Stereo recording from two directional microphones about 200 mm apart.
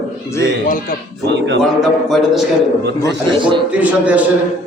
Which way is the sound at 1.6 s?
Centre (ahead or behind).